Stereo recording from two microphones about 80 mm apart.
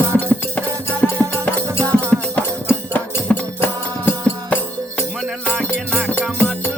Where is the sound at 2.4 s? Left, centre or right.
Left.